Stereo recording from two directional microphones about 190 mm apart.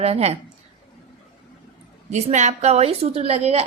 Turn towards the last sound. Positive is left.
turn(degrees=-35)  # may be behind; listen again after turning